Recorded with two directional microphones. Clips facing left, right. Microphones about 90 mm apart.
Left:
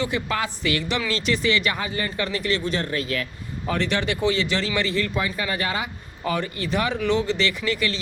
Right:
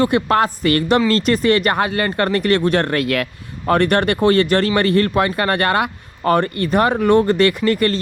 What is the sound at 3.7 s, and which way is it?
Speech, 55° right (ahead or behind).